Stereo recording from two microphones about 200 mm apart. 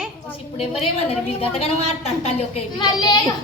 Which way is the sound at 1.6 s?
30° left (ahead or behind).